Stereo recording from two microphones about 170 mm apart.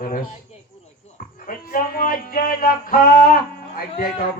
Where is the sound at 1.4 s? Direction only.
55° left (ahead or behind).